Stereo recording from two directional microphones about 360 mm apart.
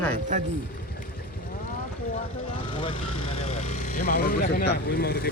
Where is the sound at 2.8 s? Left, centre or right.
Centre.